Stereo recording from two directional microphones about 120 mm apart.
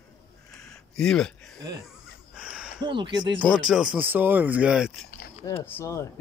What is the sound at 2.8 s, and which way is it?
Speech, 40° right (ahead or behind).